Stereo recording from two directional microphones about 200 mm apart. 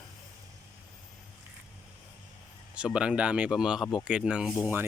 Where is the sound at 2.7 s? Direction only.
5° right (ahead or behind).